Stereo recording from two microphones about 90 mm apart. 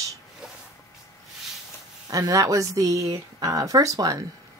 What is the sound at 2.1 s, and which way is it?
Speech, 40° right (ahead or behind).